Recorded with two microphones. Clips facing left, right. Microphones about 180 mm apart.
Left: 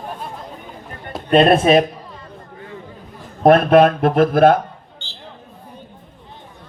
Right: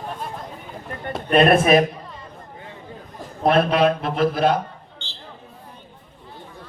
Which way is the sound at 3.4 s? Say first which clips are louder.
Left 6 dB; 50° left (ahead or behind).